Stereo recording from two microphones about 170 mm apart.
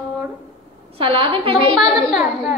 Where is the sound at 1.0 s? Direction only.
35° right (ahead or behind).